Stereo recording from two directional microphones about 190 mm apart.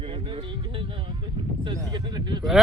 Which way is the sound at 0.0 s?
30° right (ahead or behind).